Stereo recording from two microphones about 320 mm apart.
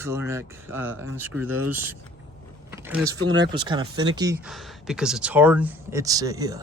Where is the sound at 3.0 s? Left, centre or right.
Right.